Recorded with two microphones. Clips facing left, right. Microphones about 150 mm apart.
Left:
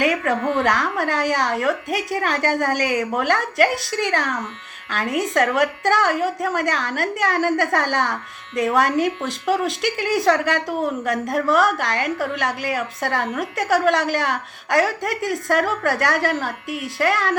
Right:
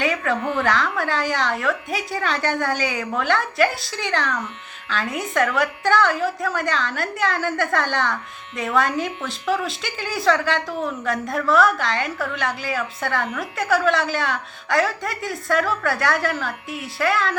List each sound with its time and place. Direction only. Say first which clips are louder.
0.0 s a woman's voice: left 3 dB; 45° left (ahead or behind)